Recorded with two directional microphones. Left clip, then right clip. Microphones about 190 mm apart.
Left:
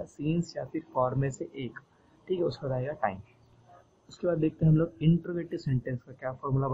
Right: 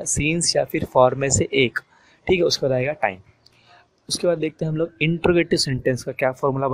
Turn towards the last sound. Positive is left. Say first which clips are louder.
# right 13 dB
turn(degrees=-50)  # may be behind; listen again after turning